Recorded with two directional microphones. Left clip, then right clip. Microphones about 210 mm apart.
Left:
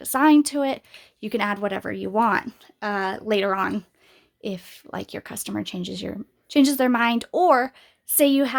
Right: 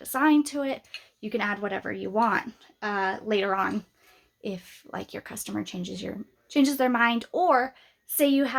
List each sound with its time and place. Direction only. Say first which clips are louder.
0.0 s speech: left 5 dB; 45° left (ahead or behind)